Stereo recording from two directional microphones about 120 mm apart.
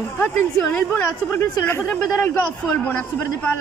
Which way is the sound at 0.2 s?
10° left (ahead or behind).